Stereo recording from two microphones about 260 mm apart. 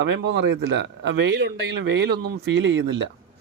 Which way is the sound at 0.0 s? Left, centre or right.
Right.